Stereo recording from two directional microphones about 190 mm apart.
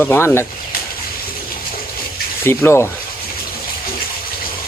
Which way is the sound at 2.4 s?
15° left (ahead or behind).